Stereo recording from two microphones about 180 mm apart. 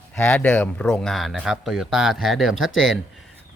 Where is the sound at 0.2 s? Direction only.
5° left (ahead or behind).